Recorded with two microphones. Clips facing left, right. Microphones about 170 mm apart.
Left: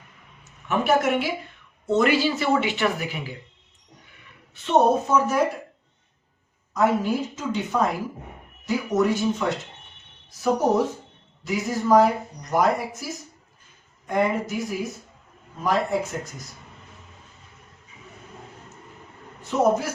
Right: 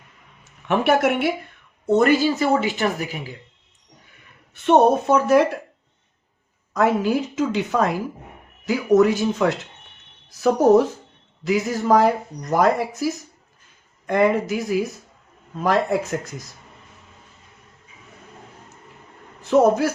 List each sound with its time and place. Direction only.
0.7 s speech: 65° right (ahead or behind)
1.9 s speech: 50° right (ahead or behind)
4.5 s speech: 60° right (ahead or behind)
6.7 s speech: 90° right
11.4 s speech: 90° right
14.1 s speech: 90° right
19.5 s speech: 90° right